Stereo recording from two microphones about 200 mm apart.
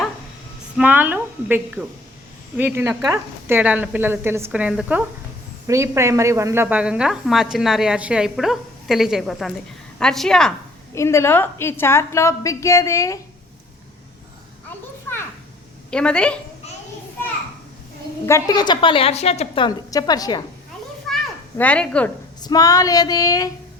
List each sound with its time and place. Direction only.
0.8 s a woman's voice: 10° right (ahead or behind)
10.9 s a woman's voice: 15° left (ahead or behind)
15.9 s a woman's voice: 5° left (ahead or behind)
18.3 s a woman's voice: 15° left (ahead or behind)
21.1 s a sound: centre (ahead or behind)
21.6 s a woman's voice: 5° left (ahead or behind)
22.4 s a woman's voice: 20° left (ahead or behind)